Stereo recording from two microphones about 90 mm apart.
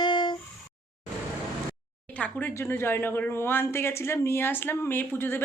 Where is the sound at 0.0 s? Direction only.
60° left (ahead or behind).